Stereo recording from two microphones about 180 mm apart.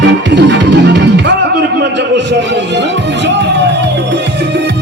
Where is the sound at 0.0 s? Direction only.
80° right.